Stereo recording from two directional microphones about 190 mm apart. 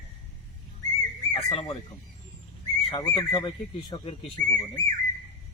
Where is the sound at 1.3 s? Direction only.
30° left (ahead or behind).